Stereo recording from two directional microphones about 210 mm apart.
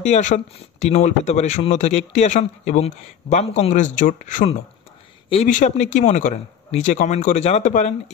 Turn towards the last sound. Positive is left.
turn(degrees=35)  # may be behind; listen again after turning